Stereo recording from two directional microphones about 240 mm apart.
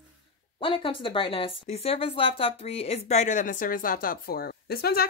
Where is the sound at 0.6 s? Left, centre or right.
Left.